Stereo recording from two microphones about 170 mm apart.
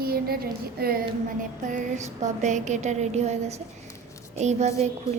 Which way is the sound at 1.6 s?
50° right (ahead or behind).